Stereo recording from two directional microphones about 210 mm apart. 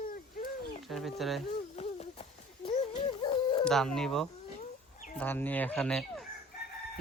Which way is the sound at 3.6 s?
5° left (ahead or behind).